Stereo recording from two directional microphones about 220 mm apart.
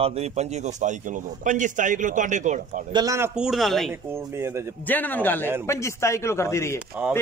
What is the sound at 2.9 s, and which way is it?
Speech, 15° right (ahead or behind).